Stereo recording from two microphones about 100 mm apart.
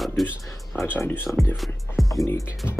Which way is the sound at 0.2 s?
Centre (ahead or behind).